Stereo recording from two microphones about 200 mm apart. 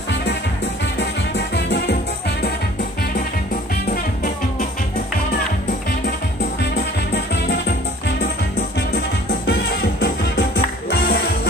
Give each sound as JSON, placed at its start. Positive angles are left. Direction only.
{"t": 0.9, "sound": "music", "side_deg": 60}
{"t": 3.9, "sound": "music", "side_deg": 45}
{"t": 6.7, "sound": "music", "side_deg": 60}